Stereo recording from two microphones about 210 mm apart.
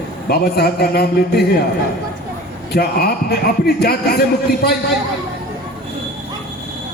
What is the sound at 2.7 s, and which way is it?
A man's voice, 50° left (ahead or behind).